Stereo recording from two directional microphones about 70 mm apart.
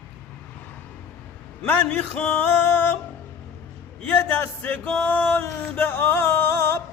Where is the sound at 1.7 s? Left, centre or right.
Left.